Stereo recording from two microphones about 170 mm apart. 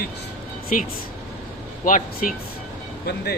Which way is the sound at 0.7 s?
50° left (ahead or behind).